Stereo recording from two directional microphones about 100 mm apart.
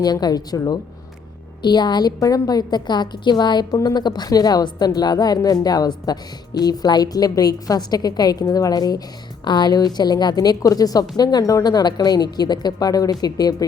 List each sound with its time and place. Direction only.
0.0 s a woman's voice: 40° left (ahead or behind)